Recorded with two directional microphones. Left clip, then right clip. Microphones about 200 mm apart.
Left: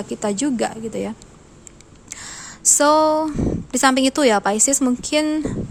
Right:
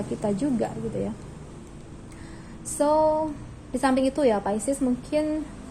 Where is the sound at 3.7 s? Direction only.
40° left (ahead or behind).